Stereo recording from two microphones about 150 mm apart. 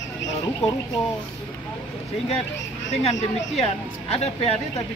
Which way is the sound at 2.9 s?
50° left (ahead or behind).